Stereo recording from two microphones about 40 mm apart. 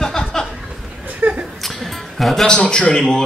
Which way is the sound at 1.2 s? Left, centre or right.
Right.